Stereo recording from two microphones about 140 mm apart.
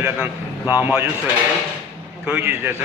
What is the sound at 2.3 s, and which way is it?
Speech, 15° right (ahead or behind).